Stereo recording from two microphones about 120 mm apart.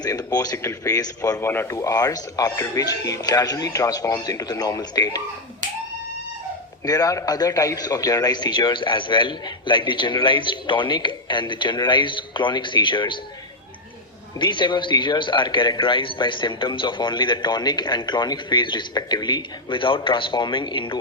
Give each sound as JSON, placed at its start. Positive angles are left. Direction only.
{"t": 0.0, "sound": "a man's voice", "side_deg": 30}
{"t": 6.8, "sound": "a man's voice", "side_deg": 30}
{"t": 14.3, "sound": "a man's voice", "side_deg": 40}